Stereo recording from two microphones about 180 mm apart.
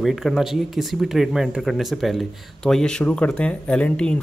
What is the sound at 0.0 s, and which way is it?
Speech, centre (ahead or behind).